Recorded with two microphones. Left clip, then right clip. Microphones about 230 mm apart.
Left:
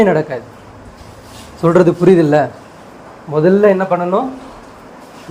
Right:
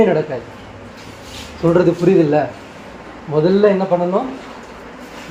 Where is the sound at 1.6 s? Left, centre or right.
Left.